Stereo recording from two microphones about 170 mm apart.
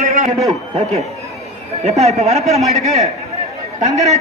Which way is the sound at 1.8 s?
40° right (ahead or behind).